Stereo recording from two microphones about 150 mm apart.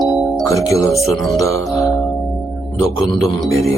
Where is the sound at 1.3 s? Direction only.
20° left (ahead or behind).